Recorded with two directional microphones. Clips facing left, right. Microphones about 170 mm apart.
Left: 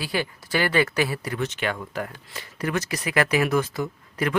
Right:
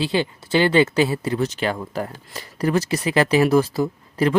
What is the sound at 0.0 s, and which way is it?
Speech, 25° right (ahead or behind).